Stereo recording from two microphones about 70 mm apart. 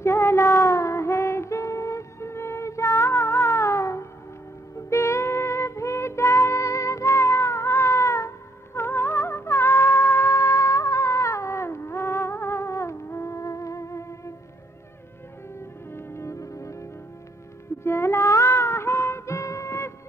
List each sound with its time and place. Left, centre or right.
0.0 s music: left
15.9 s music: left